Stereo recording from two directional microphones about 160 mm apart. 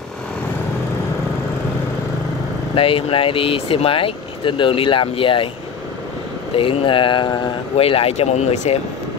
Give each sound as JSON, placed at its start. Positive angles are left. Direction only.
{"t": 2.7, "sound": "speech", "side_deg": 35}
{"t": 6.5, "sound": "speech", "side_deg": 35}